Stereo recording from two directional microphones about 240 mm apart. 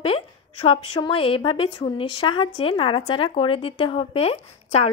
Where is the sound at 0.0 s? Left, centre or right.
Left.